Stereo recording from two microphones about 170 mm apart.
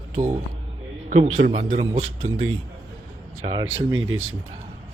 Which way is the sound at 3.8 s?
20° right (ahead or behind).